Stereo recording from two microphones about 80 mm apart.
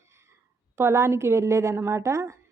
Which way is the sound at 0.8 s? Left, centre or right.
Right.